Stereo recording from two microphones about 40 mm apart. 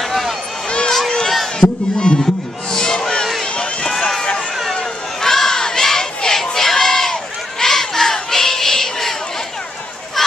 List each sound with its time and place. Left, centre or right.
0.7 s run: centre
0.9 s crowd: centre
1.6 s speech: left
2.7 s a sound: centre
4.0 s run: centre
5.2 s crowd: centre
7.6 s a sound: centre